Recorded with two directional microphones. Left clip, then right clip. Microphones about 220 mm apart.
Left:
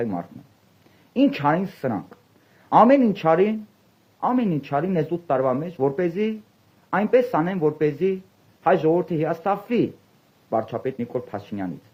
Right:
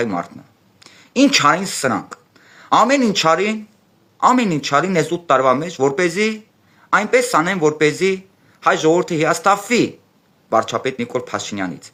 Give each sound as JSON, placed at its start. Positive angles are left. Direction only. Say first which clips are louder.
{"t": 0.0, "sound": "speech", "louder": "right 7 dB", "side_deg": -20}